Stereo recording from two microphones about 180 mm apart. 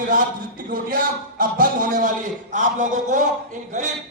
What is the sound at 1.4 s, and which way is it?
Music, 50° right (ahead or behind).